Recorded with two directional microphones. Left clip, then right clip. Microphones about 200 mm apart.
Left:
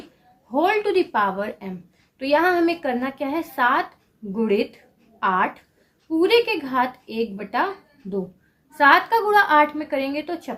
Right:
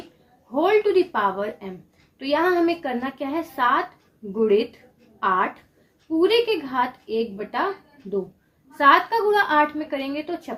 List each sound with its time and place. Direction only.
0.5 s a woman's voice: 35° left (ahead or behind)
8.8 s a woman's voice: 35° left (ahead or behind)